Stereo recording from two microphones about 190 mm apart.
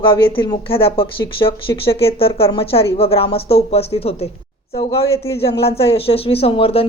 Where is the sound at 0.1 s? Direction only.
25° left (ahead or behind).